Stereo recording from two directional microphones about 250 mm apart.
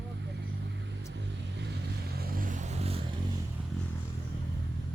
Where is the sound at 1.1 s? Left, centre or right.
Right.